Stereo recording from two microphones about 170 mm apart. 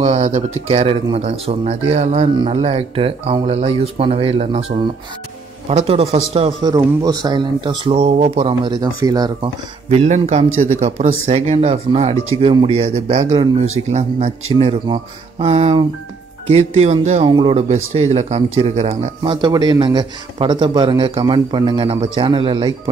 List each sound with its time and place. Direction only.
0.0 s speech: 40° right (ahead or behind)
6.6 s a man's voice: 20° right (ahead or behind)
9.8 s a man's voice: 40° right (ahead or behind)
19.3 s a man's voice: 25° right (ahead or behind)